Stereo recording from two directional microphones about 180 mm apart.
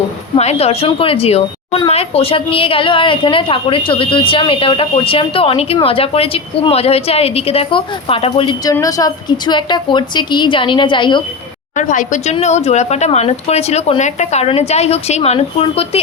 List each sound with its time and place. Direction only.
0.3 s a woman's voice: 35° left (ahead or behind)
11.8 s a woman's voice: 45° left (ahead or behind)